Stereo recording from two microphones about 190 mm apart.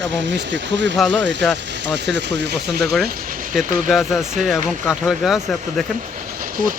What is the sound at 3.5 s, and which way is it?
Speech, centre (ahead or behind).